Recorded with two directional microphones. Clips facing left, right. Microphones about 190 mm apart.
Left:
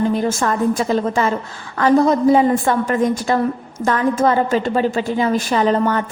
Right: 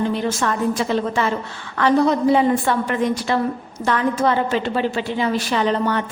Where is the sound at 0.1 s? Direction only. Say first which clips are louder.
Left 3 dB; 45° left (ahead or behind).